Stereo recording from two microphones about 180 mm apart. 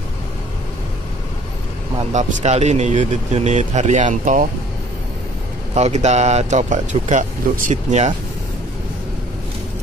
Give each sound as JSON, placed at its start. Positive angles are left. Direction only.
{"t": 2.0, "sound": "speech", "side_deg": -35}
{"t": 5.8, "sound": "speech", "side_deg": -40}